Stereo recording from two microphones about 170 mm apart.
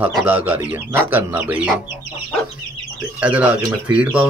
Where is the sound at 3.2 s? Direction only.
10° right (ahead or behind).